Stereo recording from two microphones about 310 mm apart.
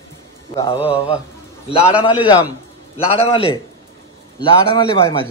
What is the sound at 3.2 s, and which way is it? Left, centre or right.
A man's voice, centre.